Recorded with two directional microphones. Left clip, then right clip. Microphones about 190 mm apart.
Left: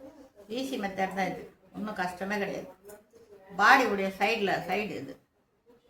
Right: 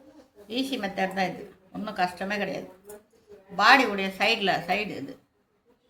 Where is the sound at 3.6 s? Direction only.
45° right (ahead or behind).